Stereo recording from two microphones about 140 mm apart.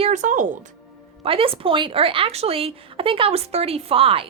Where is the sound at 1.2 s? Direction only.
40° right (ahead or behind).